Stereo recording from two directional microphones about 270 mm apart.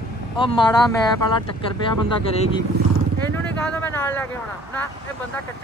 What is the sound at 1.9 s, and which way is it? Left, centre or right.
Speech, left.